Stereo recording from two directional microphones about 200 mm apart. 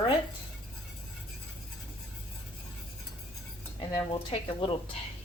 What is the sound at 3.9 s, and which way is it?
Speech, 25° left (ahead or behind).